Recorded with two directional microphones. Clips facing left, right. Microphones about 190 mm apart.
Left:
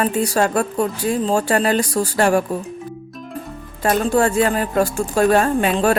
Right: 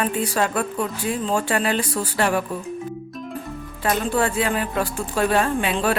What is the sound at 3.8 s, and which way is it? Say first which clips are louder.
Speech: left 5 dB; 45° left (ahead or behind).